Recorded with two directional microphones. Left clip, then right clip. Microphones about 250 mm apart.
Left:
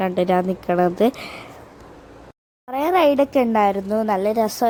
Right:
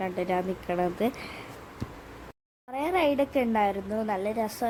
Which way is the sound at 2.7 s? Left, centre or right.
Left.